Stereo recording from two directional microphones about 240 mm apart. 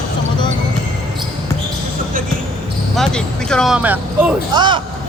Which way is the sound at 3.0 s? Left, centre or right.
Centre.